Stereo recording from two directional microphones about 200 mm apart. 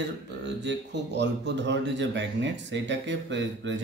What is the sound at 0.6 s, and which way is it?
A man's voice, 60° right (ahead or behind).